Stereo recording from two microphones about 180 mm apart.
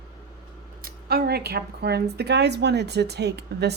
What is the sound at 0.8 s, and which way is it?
A woman's voice, 55° right (ahead or behind).